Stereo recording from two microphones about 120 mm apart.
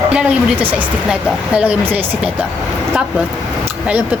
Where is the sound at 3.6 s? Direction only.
15° right (ahead or behind).